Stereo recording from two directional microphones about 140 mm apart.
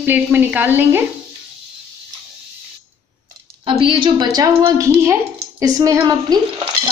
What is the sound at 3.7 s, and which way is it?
A woman's voice, 40° right (ahead or behind).